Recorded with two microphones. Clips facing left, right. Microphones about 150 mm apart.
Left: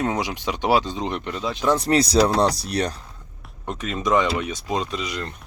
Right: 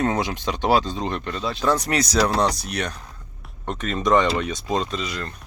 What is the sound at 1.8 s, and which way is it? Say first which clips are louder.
Speech: left 3 dB; 30° left (ahead or behind).